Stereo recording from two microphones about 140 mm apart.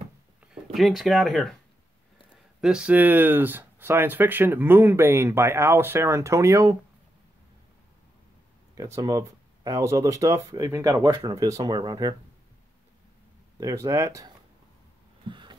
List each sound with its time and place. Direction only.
0.7 s speech: centre (ahead or behind)
2.6 s speech: 5° right (ahead or behind); by 6.8 s 20° right (ahead or behind)
8.7 s speech: 20° right (ahead or behind)
13.6 s speech: 25° right (ahead or behind)
15.2 s a sound: 35° right (ahead or behind)